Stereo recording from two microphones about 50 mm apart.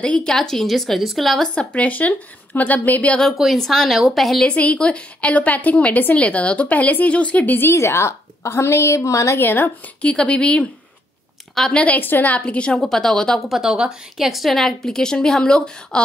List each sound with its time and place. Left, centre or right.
0.0 s a woman's voice: left
0.3 s a woman's voice: centre
1.5 s a woman's voice: left
3.5 s a woman's voice: centre
4.5 s a woman's voice: left
7.4 s speech: left
7.7 s a woman's voice: left
9.4 s speech: left
10.0 s a woman's voice: left
11.7 s a woman's voice: left
12.0 s a woman's voice: left
12.4 s a woman's voice: left
12.7 s a woman's voice: centre
13.5 s a woman's voice: centre